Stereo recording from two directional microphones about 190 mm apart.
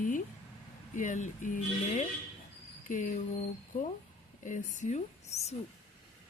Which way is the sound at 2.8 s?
45° left (ahead or behind).